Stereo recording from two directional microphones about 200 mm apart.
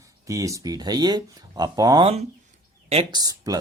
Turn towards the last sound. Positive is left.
turn(degrees=-20)  # may be behind; listen again after turning